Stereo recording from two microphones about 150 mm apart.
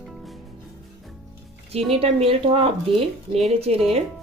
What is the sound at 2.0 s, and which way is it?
Speech, 40° right (ahead or behind).